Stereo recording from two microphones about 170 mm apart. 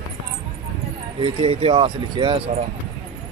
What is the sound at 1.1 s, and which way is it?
Speech, 30° right (ahead or behind).